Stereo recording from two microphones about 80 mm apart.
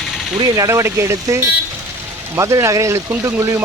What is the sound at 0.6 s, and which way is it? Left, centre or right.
Speech, right.